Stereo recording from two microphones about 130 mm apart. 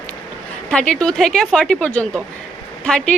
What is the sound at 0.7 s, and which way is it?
A woman's voice, 5° left (ahead or behind).